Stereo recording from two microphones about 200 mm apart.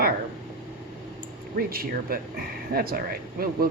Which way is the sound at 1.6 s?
50° right (ahead or behind).